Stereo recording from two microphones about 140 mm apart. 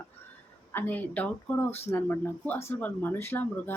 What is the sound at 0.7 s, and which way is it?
Speech, 15° left (ahead or behind).